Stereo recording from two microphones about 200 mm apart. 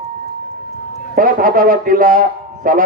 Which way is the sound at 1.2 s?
45° right (ahead or behind).